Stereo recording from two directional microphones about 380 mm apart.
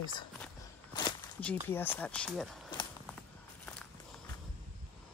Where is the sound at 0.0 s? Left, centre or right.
Centre.